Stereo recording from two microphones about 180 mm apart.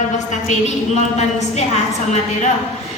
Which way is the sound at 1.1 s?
40° left (ahead or behind).